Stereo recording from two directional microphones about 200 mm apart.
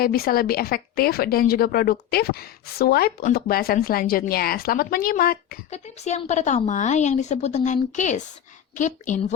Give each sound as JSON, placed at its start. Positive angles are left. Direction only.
{"t": 0.0, "sound": "a woman's voice", "side_deg": 50}
{"t": 5.7, "sound": "a woman's voice", "side_deg": 35}